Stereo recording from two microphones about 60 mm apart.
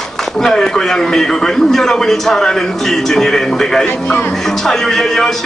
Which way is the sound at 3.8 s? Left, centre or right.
Left.